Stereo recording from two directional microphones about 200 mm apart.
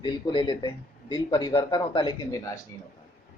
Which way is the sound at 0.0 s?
25° left (ahead or behind).